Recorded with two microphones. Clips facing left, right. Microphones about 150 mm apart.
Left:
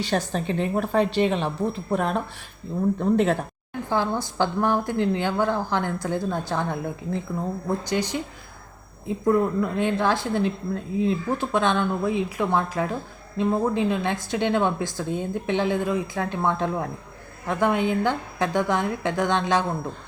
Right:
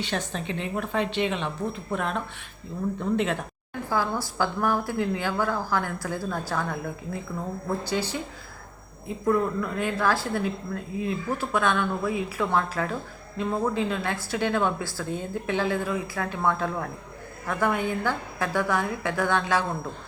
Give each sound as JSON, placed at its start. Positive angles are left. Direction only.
{"t": 0.0, "sound": "a woman's voice", "side_deg": 40}
{"t": 3.8, "sound": "speech", "side_deg": 20}